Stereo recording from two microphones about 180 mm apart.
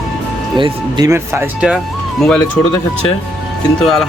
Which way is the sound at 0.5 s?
25° right (ahead or behind).